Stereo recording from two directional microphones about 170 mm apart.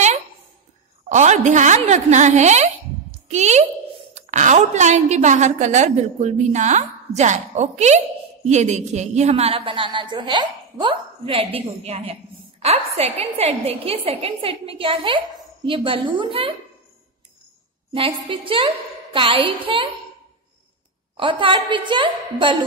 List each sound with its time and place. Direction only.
1.0 s a woman's voice: 45° right (ahead or behind)
17.9 s a woman's voice: 30° right (ahead or behind)
21.2 s a woman's voice: 30° right (ahead or behind)